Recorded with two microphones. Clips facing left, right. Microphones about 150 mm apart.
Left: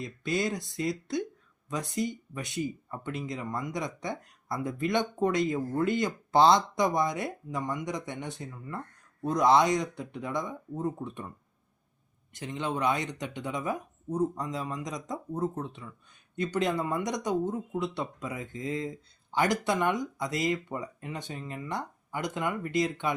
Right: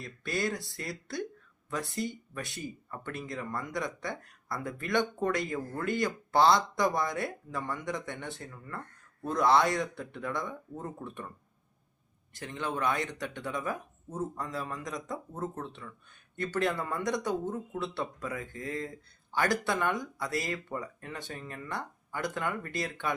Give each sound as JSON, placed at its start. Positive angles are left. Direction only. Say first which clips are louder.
{"t": 0.0, "sound": "speech", "louder": "left 3 dB", "side_deg": 20}
{"t": 12.3, "sound": "speech", "louder": "left 3 dB", "side_deg": 20}